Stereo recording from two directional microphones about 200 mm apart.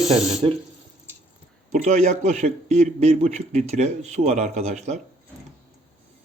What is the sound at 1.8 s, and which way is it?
A man's voice, 35° right (ahead or behind).